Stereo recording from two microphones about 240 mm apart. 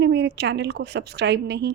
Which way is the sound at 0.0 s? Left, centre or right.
Right.